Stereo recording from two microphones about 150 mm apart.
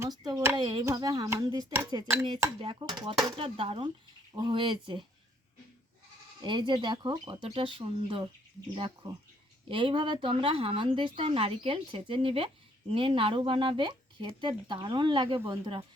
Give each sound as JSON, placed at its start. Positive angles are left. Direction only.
{"t": 0.0, "sound": "a woman's voice", "side_deg": -25}
{"t": 6.4, "sound": "a woman's voice", "side_deg": -30}